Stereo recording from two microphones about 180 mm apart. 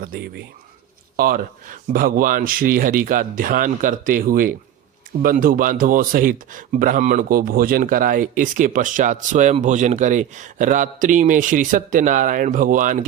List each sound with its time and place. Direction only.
0.0 s speech: 55° right (ahead or behind)